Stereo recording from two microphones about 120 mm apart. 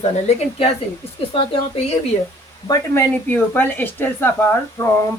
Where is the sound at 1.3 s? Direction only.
55° left (ahead or behind).